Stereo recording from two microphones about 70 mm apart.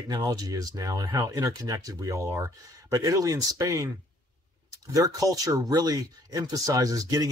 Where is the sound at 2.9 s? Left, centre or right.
Right.